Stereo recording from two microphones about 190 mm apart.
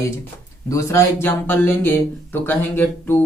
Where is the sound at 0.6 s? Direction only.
15° left (ahead or behind).